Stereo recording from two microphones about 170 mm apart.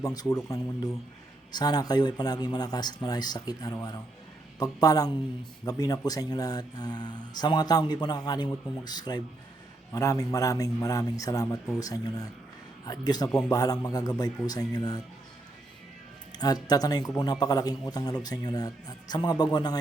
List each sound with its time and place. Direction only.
0.0 s speech: 20° left (ahead or behind)
16.4 s speech: 20° left (ahead or behind)